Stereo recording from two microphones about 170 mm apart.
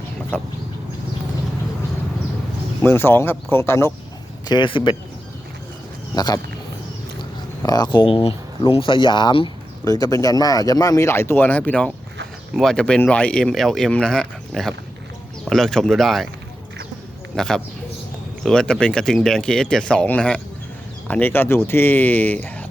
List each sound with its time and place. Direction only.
0.3 s speech: 10° left (ahead or behind)
2.8 s speech: 15° left (ahead or behind)
4.4 s speech: 25° left (ahead or behind)
6.1 s speech: 25° left (ahead or behind)
7.6 s speech: 25° left (ahead or behind); by 16.3 s centre (ahead or behind)
17.3 s speech: 5° left (ahead or behind)